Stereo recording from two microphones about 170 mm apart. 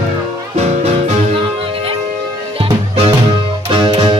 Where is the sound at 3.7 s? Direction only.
30° right (ahead or behind).